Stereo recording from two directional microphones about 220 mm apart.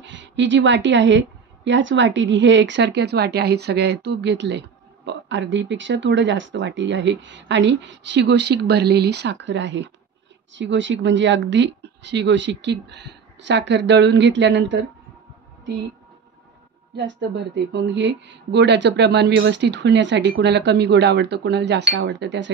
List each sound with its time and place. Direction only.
0.0 s a woman's voice: 55° right (ahead or behind)
17.7 s speech: 55° right (ahead or behind)